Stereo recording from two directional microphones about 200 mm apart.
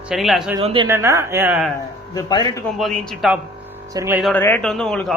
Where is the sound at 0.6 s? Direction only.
25° right (ahead or behind).